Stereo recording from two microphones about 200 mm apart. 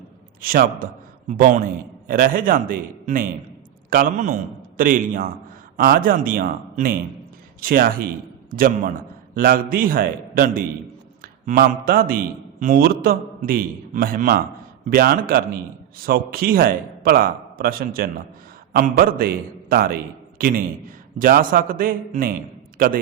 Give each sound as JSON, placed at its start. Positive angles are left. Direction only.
{"t": 0.4, "sound": "a man's voice", "side_deg": -45}